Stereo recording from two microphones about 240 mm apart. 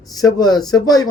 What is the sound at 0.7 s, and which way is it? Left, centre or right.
Speech, centre.